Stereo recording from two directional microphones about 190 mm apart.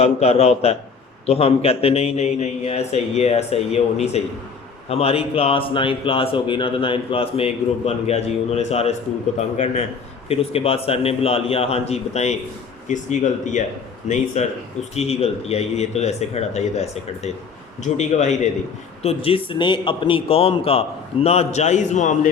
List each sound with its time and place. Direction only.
0.0 s a man's voice: 35° left (ahead or behind)